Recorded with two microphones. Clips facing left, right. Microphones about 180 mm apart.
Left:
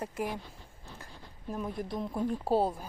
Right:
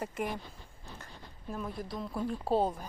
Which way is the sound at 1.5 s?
15° left (ahead or behind).